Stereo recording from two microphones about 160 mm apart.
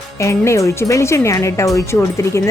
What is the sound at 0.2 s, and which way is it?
A woman's voice, 20° left (ahead or behind).